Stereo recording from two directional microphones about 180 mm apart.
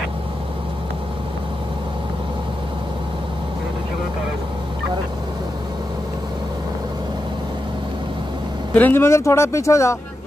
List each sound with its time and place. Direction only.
8.7 s speech: 10° left (ahead or behind)